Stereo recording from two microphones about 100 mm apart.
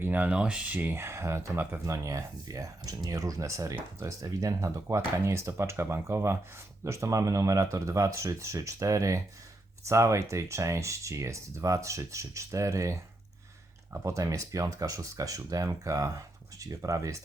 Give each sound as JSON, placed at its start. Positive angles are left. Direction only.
{"t": 0.0, "sound": "speech", "side_deg": -20}